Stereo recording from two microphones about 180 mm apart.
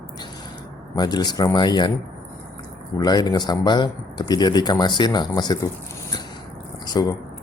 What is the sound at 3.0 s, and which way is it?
A man's voice, 20° left (ahead or behind).